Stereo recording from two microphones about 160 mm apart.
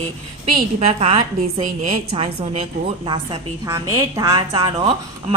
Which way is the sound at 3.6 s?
20° right (ahead or behind).